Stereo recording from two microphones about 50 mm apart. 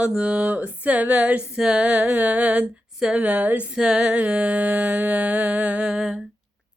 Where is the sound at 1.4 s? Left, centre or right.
Centre.